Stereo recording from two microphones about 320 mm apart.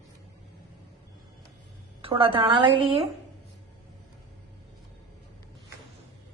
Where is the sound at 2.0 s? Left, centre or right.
Centre.